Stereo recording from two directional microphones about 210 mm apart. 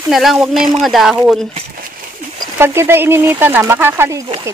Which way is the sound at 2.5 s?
10° right (ahead or behind).